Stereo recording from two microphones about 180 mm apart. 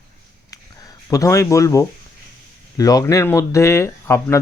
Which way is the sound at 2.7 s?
20° left (ahead or behind).